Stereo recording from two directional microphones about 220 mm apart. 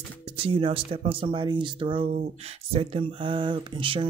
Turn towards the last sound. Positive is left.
turn(degrees=-20)  # may be behind; listen again after turning